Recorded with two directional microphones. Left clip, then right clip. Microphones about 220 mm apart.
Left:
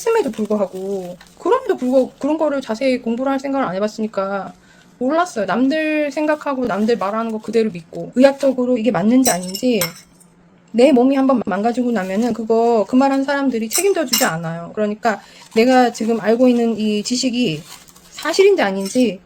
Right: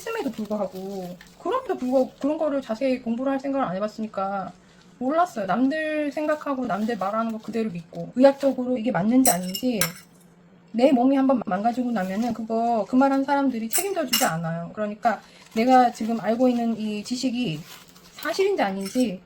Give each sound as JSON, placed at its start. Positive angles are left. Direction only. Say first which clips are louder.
{"t": 0.0, "sound": "speech", "louder": "left 12 dB", "side_deg": 50}